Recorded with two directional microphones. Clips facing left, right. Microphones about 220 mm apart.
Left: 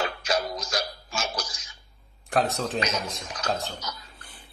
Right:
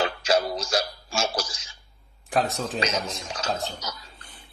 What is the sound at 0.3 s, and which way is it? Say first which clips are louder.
Music: right 5 dB; 30° right (ahead or behind).